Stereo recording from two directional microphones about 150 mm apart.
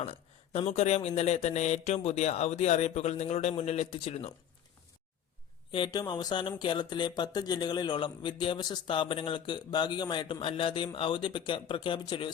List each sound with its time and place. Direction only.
0.0 s speech: 45° left (ahead or behind)
5.7 s speech: 30° left (ahead or behind)